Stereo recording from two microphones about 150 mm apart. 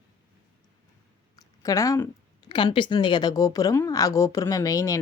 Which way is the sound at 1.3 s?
20° left (ahead or behind).